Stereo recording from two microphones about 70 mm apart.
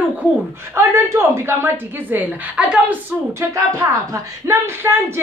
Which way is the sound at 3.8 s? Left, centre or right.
Right.